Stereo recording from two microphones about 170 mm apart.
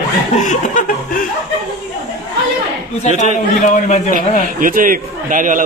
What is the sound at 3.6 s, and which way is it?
Chuckle, 45° left (ahead or behind).